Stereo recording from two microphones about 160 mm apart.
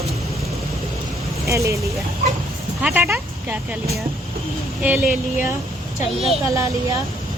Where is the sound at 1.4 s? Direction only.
20° right (ahead or behind).